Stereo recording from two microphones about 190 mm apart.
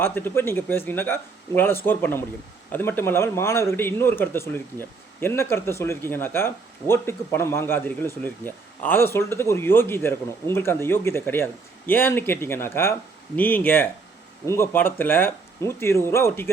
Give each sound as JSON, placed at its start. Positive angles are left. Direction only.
{"t": 0.0, "sound": "speech", "side_deg": 10}